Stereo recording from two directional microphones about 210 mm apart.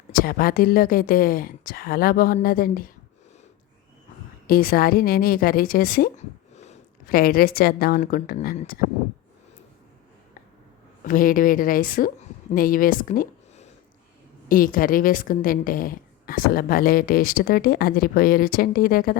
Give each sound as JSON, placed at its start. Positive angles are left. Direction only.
{"t": 0.1, "sound": "a woman's voice", "side_deg": 45}
{"t": 4.4, "sound": "a woman's voice", "side_deg": 45}
{"t": 7.1, "sound": "a woman's voice", "side_deg": 45}
{"t": 11.0, "sound": "a woman's voice", "side_deg": 40}